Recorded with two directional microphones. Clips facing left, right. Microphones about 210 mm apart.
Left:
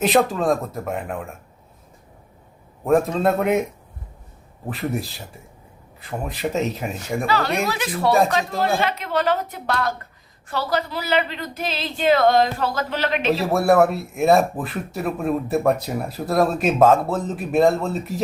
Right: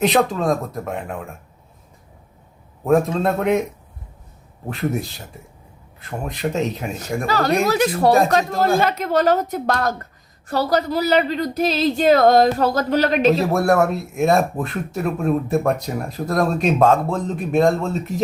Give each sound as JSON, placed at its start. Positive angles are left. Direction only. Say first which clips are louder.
{"t": 0.0, "sound": "speech", "louder": "right 1 dB", "side_deg": 0}
{"t": 2.8, "sound": "speech", "louder": "right 1 dB", "side_deg": 0}
{"t": 4.7, "sound": "speech", "louder": "right 2 dB", "side_deg": 0}
{"t": 7.3, "sound": "a woman's voice", "louder": "right 5 dB", "side_deg": -40}
{"t": 13.3, "sound": "speech", "louder": "even", "side_deg": 0}